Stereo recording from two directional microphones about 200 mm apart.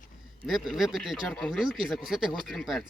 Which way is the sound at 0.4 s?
Centre (ahead or behind).